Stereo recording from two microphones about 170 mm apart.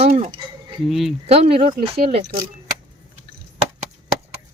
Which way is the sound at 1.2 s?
35° right (ahead or behind).